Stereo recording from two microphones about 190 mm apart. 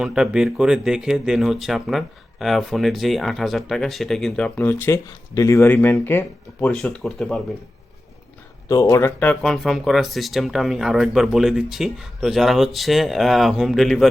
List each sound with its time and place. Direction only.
0.0 s speech: 5° right (ahead or behind)
8.6 s speech: 15° left (ahead or behind); by 14.1 s centre (ahead or behind)